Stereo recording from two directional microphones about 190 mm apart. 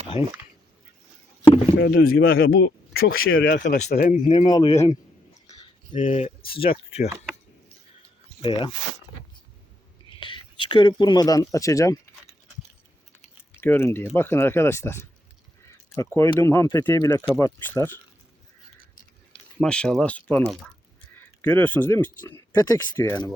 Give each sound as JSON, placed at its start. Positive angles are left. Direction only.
{"t": 0.1, "sound": "speech", "side_deg": -15}
{"t": 1.7, "sound": "speech", "side_deg": 65}
{"t": 2.2, "sound": "speech", "side_deg": 55}
{"t": 3.2, "sound": "speech", "side_deg": 80}
{"t": 3.9, "sound": "speech", "side_deg": 45}
{"t": 4.4, "sound": "speech", "side_deg": 20}
{"t": 5.5, "sound": "a sound", "side_deg": 35}
{"t": 6.5, "sound": "speech", "side_deg": 30}
{"t": 8.4, "sound": "speech", "side_deg": 25}
{"t": 10.1, "sound": "speech", "side_deg": 25}
{"t": 13.1, "sound": "speech", "side_deg": 10}
{"t": 19.5, "sound": "speech", "side_deg": 5}